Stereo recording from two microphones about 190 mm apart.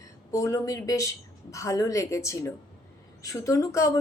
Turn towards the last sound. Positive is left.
turn(degrees=15)  # may be behind; listen again after turning